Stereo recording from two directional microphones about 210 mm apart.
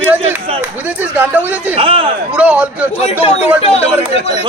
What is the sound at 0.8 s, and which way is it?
Speech, 10° right (ahead or behind).